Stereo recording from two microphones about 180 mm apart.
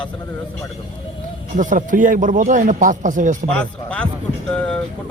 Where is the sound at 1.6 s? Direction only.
45° right (ahead or behind).